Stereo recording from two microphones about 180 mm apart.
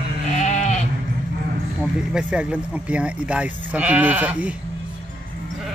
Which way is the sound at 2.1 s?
5° right (ahead or behind).